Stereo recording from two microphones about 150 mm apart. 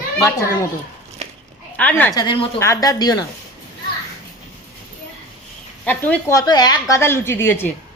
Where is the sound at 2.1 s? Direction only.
30° left (ahead or behind).